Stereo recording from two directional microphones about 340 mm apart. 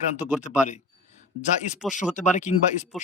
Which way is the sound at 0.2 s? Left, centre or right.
Centre.